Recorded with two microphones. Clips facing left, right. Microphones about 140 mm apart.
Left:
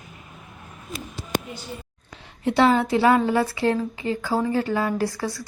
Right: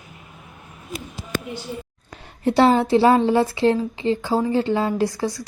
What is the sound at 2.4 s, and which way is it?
A woman's voice, 35° right (ahead or behind).